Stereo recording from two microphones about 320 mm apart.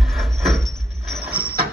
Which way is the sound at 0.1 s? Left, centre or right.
Centre.